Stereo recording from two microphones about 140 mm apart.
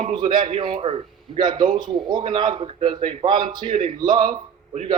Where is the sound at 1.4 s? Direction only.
30° right (ahead or behind).